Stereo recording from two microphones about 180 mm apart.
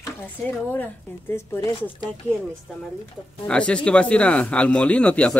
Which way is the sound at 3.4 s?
5° left (ahead or behind).